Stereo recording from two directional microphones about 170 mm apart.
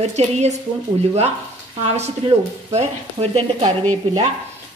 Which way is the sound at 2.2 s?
40° right (ahead or behind).